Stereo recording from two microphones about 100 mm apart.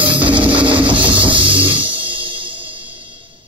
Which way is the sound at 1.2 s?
15° right (ahead or behind).